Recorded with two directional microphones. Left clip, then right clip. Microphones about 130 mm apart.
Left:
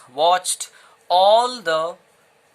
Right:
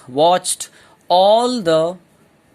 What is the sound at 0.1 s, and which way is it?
Speech, 35° right (ahead or behind).